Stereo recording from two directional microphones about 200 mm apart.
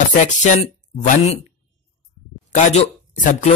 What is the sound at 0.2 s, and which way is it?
Speech, 35° left (ahead or behind).